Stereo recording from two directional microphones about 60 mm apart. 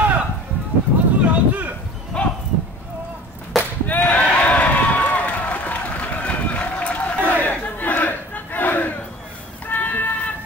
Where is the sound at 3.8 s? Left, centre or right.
Left.